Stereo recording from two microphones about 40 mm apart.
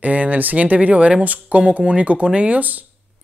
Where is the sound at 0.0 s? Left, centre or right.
Right.